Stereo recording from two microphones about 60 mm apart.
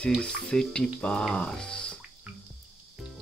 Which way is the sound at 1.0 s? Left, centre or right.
Centre.